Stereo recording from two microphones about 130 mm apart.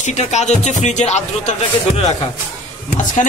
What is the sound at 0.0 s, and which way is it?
Speech, 65° left (ahead or behind).